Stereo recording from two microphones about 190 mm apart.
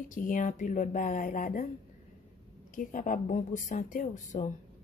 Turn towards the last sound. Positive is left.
turn(degrees=40)  # may be behind; listen again after turning